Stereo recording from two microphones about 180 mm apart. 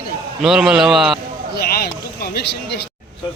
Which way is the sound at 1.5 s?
60° left (ahead or behind).